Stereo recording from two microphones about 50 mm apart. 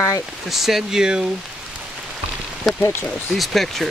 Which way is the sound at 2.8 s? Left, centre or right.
Left.